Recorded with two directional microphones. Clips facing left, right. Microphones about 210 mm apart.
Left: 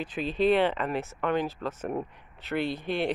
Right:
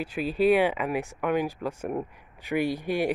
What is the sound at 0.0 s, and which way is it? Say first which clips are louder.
A man's voice: right 2 dB; 10° right (ahead or behind).